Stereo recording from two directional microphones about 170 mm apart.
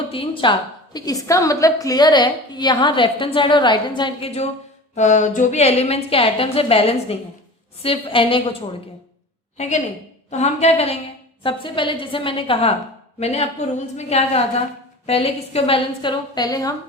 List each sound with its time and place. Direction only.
0.1 s a woman's voice: 30° left (ahead or behind)
0.9 s a woman's voice: 20° left (ahead or behind)
9.6 s a woman's voice: 40° left (ahead or behind); by 16.7 s 20° left (ahead or behind)